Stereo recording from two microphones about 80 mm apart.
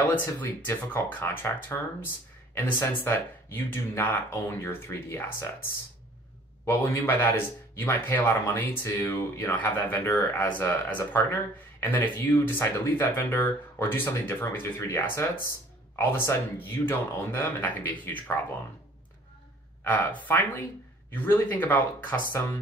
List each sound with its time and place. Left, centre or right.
0.0 s speech: left
6.6 s speech: left
19.8 s speech: left